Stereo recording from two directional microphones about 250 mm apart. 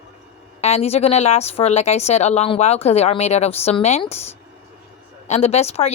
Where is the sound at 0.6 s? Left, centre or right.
Left.